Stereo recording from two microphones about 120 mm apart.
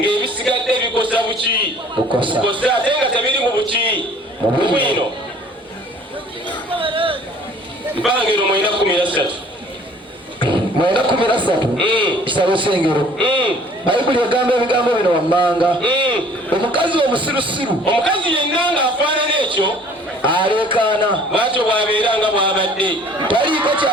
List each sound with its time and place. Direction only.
0.0 s music: 45° right (ahead or behind)
0.5 s a sound: 45° right (ahead or behind)
2.1 s a man's voice: 45° right (ahead or behind)
6.7 s a sound: 50° right (ahead or behind)
8.1 s a man's voice: 45° right (ahead or behind)
10.4 s a man's voice: 45° right (ahead or behind)